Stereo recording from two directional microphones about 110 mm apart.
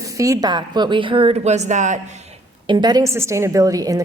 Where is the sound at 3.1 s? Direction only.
25° right (ahead or behind).